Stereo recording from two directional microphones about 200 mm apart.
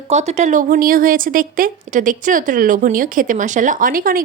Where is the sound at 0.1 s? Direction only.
35° right (ahead or behind).